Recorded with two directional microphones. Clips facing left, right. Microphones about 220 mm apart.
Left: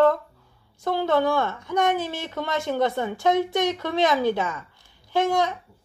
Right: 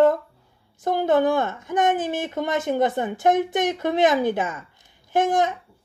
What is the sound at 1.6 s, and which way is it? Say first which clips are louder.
Speech: right 2 dB; 50° right (ahead or behind).